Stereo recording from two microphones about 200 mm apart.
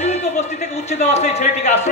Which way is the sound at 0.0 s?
35° left (ahead or behind).